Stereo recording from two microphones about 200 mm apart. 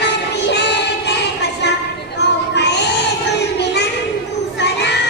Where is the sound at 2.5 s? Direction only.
60° left (ahead or behind).